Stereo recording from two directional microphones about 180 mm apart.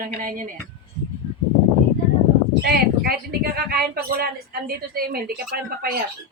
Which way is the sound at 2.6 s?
60° right (ahead or behind).